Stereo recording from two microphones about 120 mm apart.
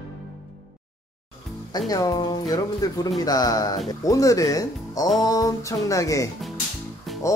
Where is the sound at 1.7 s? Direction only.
30° left (ahead or behind).